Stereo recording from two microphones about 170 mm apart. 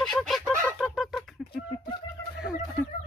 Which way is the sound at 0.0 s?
Centre (ahead or behind).